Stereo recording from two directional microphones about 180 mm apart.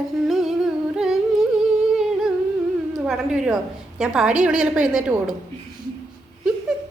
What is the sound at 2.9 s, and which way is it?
A woman's voice, centre (ahead or behind).